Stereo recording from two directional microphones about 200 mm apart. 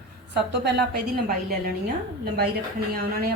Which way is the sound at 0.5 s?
55° right (ahead or behind).